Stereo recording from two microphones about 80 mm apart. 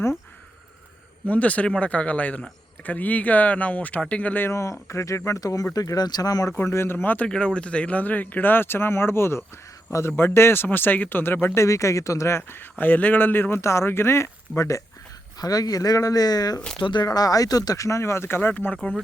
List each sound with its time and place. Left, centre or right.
1.3 s speech: centre
4.5 s speech: left
6.6 s speech: left
7.3 s speech: centre; by 12.4 s left
12.4 s speech: left
15.4 s speech: left
16.6 s speech: centre
16.8 s speech: left